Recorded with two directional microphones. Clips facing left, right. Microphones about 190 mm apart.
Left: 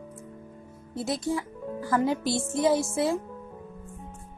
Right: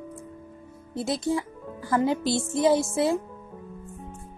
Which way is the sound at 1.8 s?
25° right (ahead or behind).